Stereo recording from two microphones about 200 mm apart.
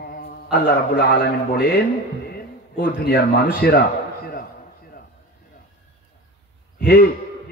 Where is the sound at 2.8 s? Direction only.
50° left (ahead or behind).